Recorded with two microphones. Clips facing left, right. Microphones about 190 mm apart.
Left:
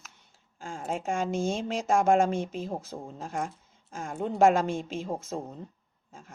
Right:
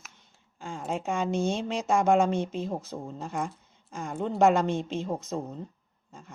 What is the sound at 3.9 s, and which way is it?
Speech, 45° left (ahead or behind).